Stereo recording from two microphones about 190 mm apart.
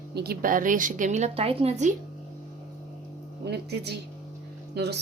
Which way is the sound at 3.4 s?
60° right (ahead or behind).